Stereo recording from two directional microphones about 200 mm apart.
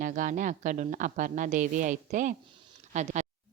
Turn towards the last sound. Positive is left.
turn(degrees=-35)  # may be behind; listen again after turning